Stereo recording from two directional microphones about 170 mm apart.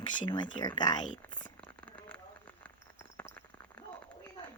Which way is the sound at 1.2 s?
25° left (ahead or behind).